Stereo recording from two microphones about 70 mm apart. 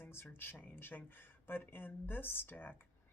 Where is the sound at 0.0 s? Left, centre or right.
Left.